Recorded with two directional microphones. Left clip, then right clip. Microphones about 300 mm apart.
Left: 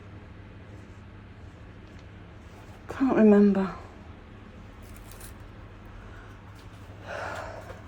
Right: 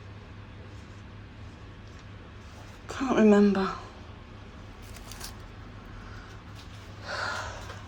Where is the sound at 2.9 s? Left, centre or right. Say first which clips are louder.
Left 1 dB; centre.